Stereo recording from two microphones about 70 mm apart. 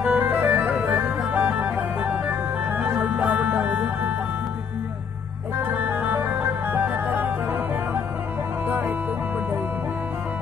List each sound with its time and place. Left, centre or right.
0.0 s music: right
5.6 s music: right
8.6 s music: right